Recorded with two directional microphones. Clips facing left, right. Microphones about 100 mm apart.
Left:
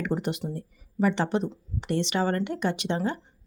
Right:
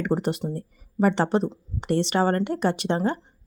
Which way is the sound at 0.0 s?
40° right (ahead or behind).